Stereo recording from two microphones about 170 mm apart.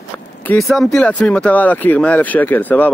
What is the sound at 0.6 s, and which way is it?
Speech, centre (ahead or behind).